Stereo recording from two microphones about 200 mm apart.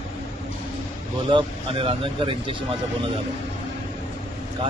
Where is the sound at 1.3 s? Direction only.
25° right (ahead or behind).